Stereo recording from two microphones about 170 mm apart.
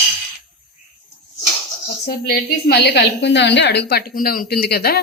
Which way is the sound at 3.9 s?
60° left (ahead or behind).